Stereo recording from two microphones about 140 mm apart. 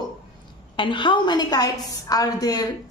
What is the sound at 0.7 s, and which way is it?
A woman's voice, 35° left (ahead or behind).